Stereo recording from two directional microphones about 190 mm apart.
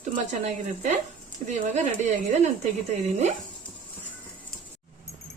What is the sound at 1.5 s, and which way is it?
Speech, 40° right (ahead or behind).